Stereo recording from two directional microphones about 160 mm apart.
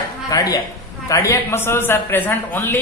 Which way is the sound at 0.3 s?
25° left (ahead or behind).